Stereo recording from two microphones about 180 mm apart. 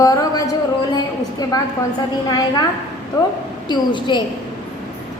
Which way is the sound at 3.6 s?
25° left (ahead or behind).